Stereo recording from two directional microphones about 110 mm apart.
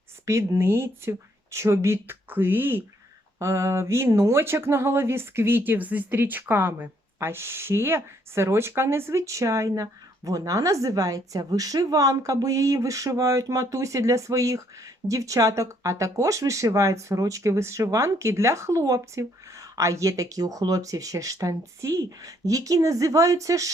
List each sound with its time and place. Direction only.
0.3 s speech: 25° right (ahead or behind)